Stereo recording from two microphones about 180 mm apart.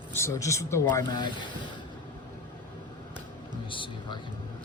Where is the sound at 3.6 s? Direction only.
30° left (ahead or behind).